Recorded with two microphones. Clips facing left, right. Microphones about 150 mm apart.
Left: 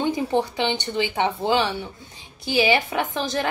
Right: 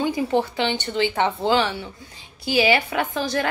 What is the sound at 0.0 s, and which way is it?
A woman's voice, 20° left (ahead or behind).